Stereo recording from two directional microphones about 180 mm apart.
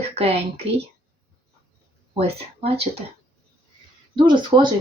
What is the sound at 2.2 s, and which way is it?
Speech, 35° right (ahead or behind).